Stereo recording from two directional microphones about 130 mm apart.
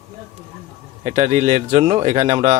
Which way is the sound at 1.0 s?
65° right (ahead or behind).